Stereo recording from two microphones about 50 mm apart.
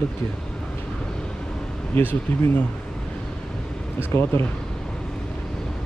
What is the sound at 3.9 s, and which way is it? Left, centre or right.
Speech, left.